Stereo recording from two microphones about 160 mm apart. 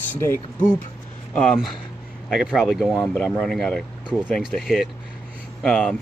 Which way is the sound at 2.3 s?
Centre (ahead or behind).